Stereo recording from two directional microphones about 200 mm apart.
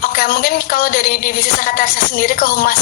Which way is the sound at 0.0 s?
45° left (ahead or behind).